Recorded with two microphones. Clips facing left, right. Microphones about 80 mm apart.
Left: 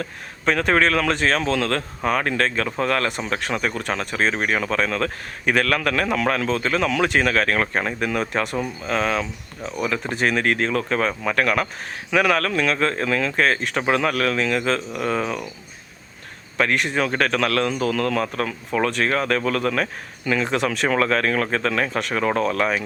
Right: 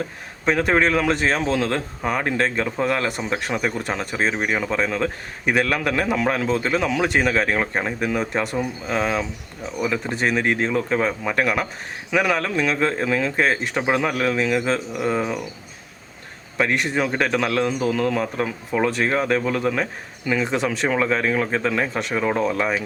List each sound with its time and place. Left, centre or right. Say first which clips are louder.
0.4 s a man's voice: even; centre
10.1 s speech: left 2 dB; centre
10.4 s a man's voice: even; centre
12.1 s a man's voice: left 1 dB; centre
16.7 s speech: even; centre
17.0 s a man's voice: even; centre